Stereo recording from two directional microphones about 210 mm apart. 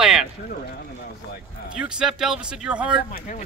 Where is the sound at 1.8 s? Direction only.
5° right (ahead or behind).